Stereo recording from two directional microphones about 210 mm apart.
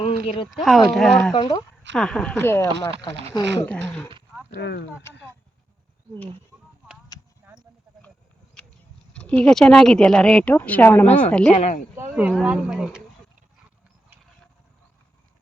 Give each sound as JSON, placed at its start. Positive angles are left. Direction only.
{"t": 0.0, "sound": "a sound", "side_deg": 25}
{"t": 0.5, "sound": "a woman's voice", "side_deg": 0}
{"t": 1.3, "sound": "speech", "side_deg": 20}
{"t": 2.0, "sound": "a woman's voice", "side_deg": 5}
{"t": 3.7, "sound": "dog", "side_deg": 5}
{"t": 4.5, "sound": "speech", "side_deg": 55}
{"t": 7.1, "sound": "a sound", "side_deg": 20}
{"t": 9.1, "sound": "a woman's voice", "side_deg": 5}
{"t": 11.5, "sound": "speech", "side_deg": 30}
{"t": 11.9, "sound": "a woman's voice", "side_deg": -5}